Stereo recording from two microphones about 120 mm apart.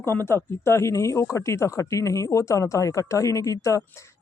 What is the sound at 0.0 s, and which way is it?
Speech, 20° left (ahead or behind).